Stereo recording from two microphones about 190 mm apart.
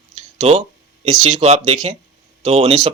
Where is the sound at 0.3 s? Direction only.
30° right (ahead or behind).